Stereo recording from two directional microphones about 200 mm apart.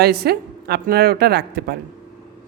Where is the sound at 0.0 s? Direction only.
50° right (ahead or behind).